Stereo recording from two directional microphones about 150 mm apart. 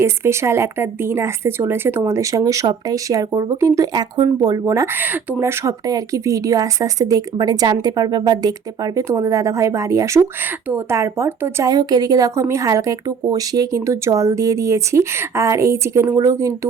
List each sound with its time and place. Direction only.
0.0 s speech: 15° right (ahead or behind)